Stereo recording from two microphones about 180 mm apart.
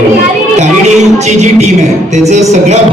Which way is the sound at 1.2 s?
40° right (ahead or behind).